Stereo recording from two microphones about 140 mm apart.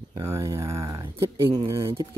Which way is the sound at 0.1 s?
20° right (ahead or behind).